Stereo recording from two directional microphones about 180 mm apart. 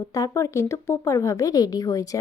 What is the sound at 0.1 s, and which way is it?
A woman's voice, 15° left (ahead or behind).